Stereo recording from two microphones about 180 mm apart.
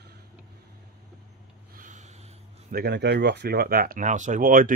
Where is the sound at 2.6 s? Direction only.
60° right (ahead or behind).